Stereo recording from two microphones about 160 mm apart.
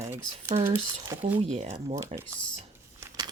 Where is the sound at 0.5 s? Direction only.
40° right (ahead or behind).